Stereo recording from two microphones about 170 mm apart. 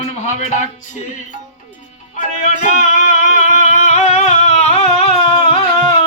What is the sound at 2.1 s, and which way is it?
Music, 45° left (ahead or behind).